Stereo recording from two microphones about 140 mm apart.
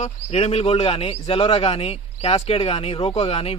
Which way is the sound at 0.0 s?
50° left (ahead or behind).